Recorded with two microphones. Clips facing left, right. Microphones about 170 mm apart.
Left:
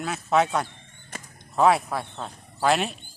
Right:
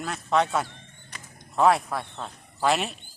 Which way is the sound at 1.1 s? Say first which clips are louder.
Left 6 dB; 45° left (ahead or behind).